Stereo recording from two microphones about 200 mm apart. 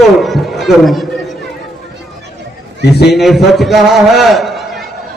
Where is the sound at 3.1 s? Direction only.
Centre (ahead or behind).